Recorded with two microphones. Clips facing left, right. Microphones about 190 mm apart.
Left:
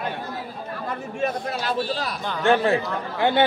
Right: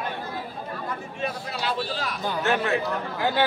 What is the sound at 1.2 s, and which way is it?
A man's voice, 45° left (ahead or behind).